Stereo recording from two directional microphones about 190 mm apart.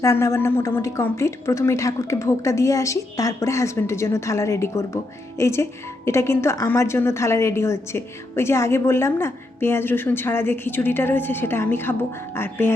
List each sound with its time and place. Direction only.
0.0 s a woman's voice: 15° left (ahead or behind)